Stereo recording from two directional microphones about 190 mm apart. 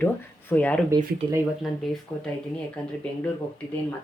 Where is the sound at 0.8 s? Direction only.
15° right (ahead or behind).